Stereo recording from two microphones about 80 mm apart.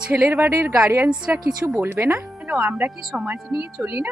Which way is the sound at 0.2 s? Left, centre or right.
Right.